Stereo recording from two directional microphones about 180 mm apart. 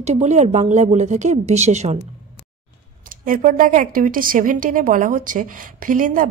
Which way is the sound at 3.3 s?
50° right (ahead or behind).